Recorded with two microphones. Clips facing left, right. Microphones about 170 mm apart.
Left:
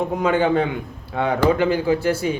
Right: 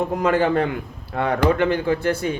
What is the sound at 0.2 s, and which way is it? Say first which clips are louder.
A man's voice: left 1 dB; centre (ahead or behind).